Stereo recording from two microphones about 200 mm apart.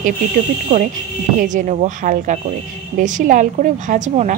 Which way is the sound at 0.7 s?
35° right (ahead or behind).